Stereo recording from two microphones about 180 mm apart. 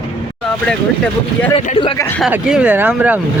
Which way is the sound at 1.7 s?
30° left (ahead or behind).